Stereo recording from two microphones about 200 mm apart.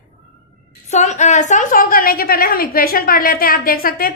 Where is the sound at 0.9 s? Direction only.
35° left (ahead or behind).